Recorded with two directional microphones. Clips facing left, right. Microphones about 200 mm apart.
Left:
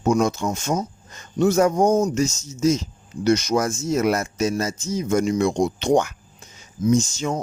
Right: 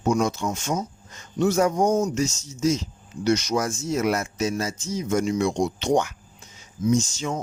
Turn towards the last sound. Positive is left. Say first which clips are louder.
# left 3 dB
turn(degrees=45)  # may be behind; listen again after turning